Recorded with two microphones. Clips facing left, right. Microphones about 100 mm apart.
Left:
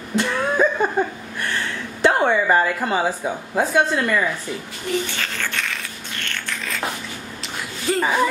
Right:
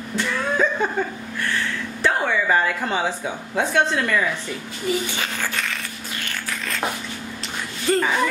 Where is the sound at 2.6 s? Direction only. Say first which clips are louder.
Left 2 dB; 5° left (ahead or behind).